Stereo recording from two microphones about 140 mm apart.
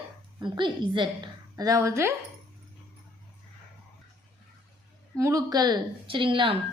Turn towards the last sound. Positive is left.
turn(degrees=-40)  # may be behind; listen again after turning